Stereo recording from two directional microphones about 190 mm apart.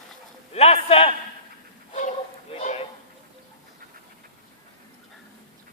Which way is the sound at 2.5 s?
30° left (ahead or behind).